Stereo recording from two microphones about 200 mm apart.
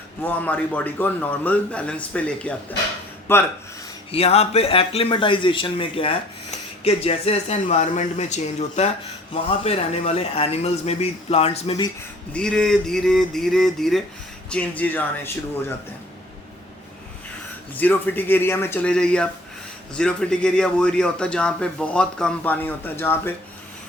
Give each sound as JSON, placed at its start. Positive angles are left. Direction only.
{"t": 0.2, "sound": "a man's voice", "side_deg": 10}
{"t": 4.1, "sound": "a man's voice", "side_deg": 30}
{"t": 12.3, "sound": "a man's voice", "side_deg": 5}
{"t": 17.7, "sound": "a man's voice", "side_deg": 10}